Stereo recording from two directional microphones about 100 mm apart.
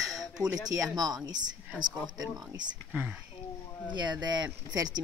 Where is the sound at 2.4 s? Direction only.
40° right (ahead or behind).